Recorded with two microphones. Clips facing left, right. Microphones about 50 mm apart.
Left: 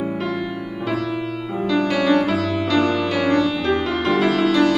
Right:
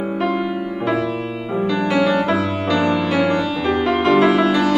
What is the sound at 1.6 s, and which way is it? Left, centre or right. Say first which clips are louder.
Music: right 2 dB; centre.